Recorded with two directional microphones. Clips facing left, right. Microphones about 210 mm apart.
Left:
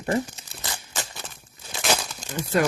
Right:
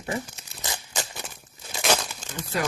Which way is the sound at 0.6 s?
15° right (ahead or behind).